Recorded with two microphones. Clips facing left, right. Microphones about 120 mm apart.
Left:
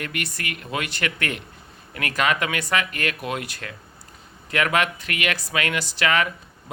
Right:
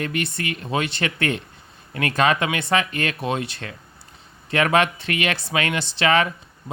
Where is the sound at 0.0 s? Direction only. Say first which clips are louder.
Right 5 dB; 30° right (ahead or behind).